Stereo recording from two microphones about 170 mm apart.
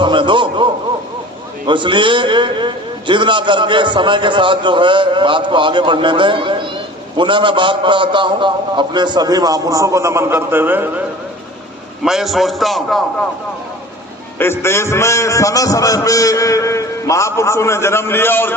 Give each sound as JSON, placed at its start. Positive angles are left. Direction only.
{"t": 0.0, "sound": "a man's voice", "side_deg": -30}
{"t": 12.0, "sound": "a man's voice", "side_deg": 0}
{"t": 14.3, "sound": "a man's voice", "side_deg": 15}